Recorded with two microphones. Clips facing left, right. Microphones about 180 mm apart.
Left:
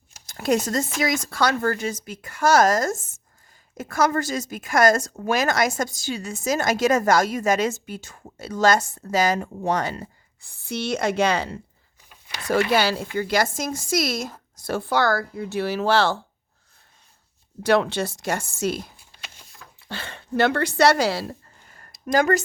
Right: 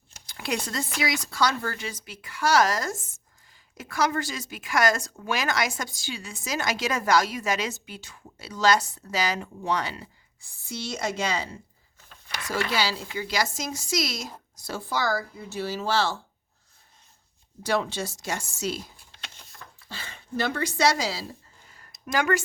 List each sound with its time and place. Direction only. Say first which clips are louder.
0.3 s speech: left 9 dB; 45° left (ahead or behind); by 16.1 s 60° left (ahead or behind)
17.6 s speech: left 7 dB; 65° left (ahead or behind)
19.9 s speech: left 6 dB; 65° left (ahead or behind); by 22.4 s 40° left (ahead or behind)